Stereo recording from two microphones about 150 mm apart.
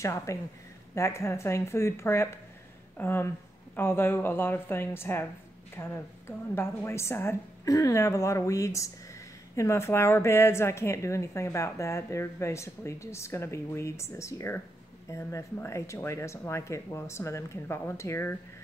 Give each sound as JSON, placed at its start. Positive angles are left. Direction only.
{"t": 0.0, "sound": "a woman's voice", "side_deg": 20}